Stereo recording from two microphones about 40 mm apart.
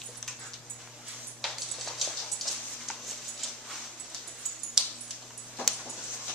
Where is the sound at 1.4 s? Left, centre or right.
Centre.